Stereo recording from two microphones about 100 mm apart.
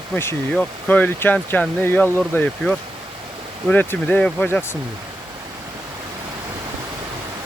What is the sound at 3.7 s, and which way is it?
Speech, 20° left (ahead or behind).